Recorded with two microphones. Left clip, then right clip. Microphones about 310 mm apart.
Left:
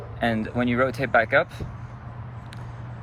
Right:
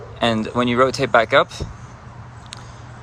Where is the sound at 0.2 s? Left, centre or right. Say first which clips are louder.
Right 6 dB; centre.